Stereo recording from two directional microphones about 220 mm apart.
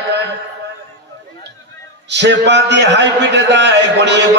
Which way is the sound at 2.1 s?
50° right (ahead or behind).